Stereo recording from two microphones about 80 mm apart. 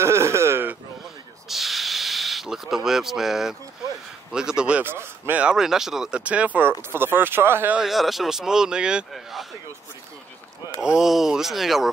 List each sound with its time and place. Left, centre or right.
0.0 s a sound: right
1.5 s a sound: centre
4.3 s speech: centre
4.8 s speech: right
5.4 s speech: centre
6.8 s speech: right
7.7 s speech: centre
9.1 s a sound: centre
10.8 s speech: centre